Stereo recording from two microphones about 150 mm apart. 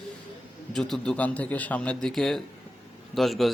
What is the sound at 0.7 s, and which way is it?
A man's voice, 5° left (ahead or behind).